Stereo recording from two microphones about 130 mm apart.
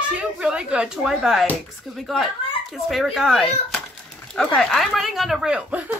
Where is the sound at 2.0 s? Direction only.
Centre (ahead or behind).